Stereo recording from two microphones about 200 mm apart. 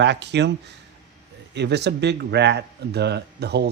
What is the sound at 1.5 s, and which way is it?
A man's voice, 60° right (ahead or behind).